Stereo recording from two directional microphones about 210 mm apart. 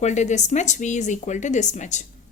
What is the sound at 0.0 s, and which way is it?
A woman's voice, 35° left (ahead or behind).